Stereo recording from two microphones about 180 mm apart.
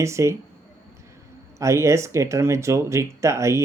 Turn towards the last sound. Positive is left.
turn(degrees=-15)  # may be behind; listen again after turning